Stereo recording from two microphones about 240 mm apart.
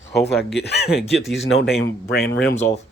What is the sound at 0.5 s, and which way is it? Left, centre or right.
Speech, left.